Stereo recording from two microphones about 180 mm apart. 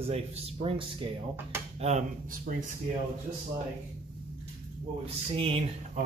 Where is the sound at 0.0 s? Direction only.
35° right (ahead or behind).